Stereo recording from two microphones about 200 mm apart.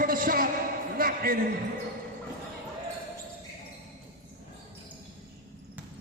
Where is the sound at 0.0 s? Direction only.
45° right (ahead or behind).